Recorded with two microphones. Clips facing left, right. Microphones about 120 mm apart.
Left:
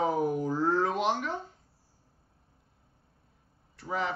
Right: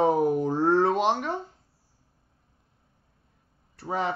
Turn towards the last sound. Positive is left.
turn(degrees=-35)  # may be behind; listen again after turning